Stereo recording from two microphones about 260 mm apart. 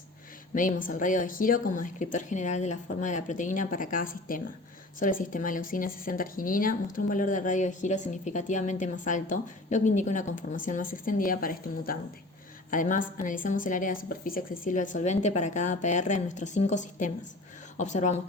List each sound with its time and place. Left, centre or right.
0.5 s a woman's voice: left